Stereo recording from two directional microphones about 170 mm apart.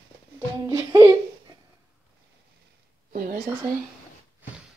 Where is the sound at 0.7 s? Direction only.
20° right (ahead or behind).